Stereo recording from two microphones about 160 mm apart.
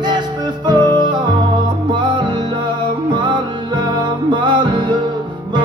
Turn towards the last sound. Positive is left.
turn(degrees=-30)  # may be behind; listen again after turning